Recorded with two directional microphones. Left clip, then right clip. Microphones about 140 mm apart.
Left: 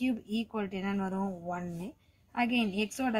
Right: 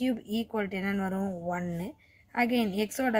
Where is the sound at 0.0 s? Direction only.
35° right (ahead or behind).